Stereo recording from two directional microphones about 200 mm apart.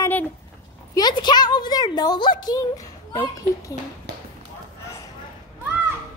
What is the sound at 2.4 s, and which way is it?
A child's voice, 20° left (ahead or behind).